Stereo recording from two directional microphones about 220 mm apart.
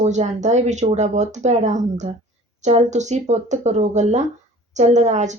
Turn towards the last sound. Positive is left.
turn(degrees=-30)  # may be behind; listen again after turning